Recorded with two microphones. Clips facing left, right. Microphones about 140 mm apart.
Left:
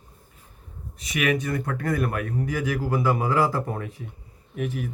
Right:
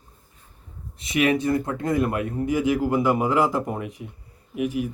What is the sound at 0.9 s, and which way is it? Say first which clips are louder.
Speech: right 3 dB; 25° right (ahead or behind).